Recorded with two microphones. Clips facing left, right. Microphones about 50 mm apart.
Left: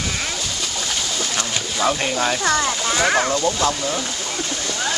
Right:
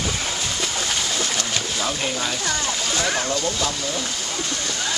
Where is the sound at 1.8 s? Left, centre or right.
Left.